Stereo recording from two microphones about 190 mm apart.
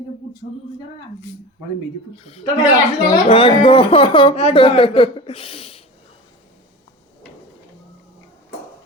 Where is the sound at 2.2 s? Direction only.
30° left (ahead or behind).